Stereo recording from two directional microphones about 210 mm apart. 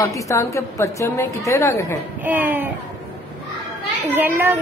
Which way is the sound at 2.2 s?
10° right (ahead or behind).